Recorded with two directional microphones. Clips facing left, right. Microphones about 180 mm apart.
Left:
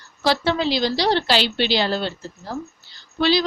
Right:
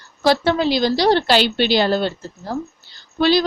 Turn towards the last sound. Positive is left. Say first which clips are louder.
# right 3 dB
turn(degrees=-50)  # may be behind; listen again after turning